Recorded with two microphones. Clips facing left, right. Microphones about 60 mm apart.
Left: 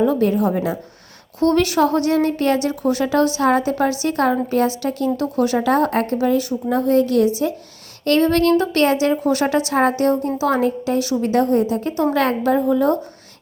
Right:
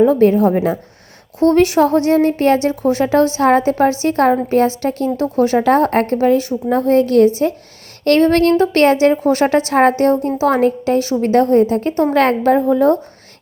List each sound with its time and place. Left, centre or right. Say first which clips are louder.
0.0 s speech: right 6 dB; right
1.4 s speech: right 4 dB; right